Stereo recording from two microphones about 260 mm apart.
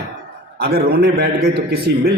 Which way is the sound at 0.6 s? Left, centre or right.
Right.